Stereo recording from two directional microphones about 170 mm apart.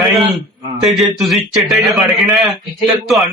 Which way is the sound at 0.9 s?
Centre (ahead or behind).